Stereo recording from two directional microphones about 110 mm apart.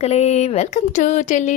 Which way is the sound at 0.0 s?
75° left (ahead or behind).